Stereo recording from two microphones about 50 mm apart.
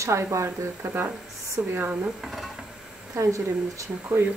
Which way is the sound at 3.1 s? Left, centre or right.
Right.